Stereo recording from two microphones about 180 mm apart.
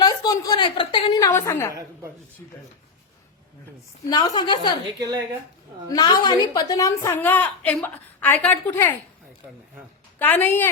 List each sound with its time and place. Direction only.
0.0 s a woman's voice: 20° left (ahead or behind)
4.1 s a woman's voice: 25° left (ahead or behind)
4.9 s a woman's voice: 20° right (ahead or behind)
5.9 s a woman's voice: 20° left (ahead or behind)
10.2 s a woman's voice: 10° left (ahead or behind)